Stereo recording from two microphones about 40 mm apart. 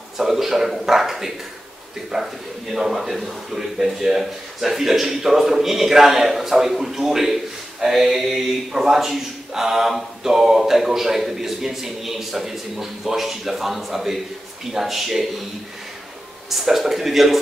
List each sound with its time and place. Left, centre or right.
0.2 s speech: centre
16.4 s speech: centre